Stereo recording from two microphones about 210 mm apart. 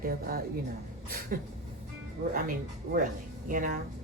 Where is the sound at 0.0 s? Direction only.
45° right (ahead or behind).